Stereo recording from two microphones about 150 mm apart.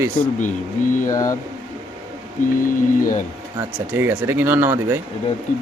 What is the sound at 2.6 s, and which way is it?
Speech, 65° left (ahead or behind).